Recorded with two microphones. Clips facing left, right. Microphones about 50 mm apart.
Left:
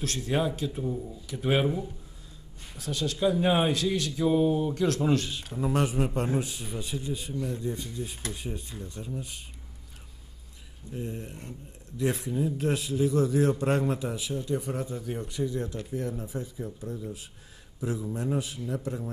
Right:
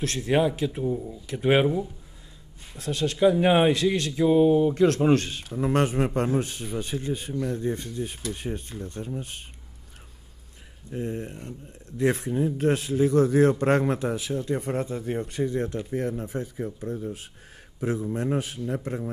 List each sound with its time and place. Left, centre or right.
0.2 s speech: right
0.8 s speech: centre
1.4 s speech: right
2.8 s a man's voice: right
4.2 s a man's voice: right
10.9 s a man's voice: right